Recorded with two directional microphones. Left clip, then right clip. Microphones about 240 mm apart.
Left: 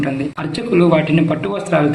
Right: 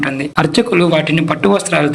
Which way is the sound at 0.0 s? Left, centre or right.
Right.